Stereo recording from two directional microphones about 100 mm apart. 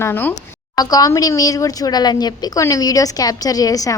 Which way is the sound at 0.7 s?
40° left (ahead or behind).